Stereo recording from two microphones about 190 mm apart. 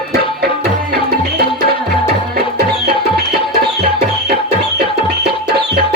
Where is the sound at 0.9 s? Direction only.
55° right (ahead or behind).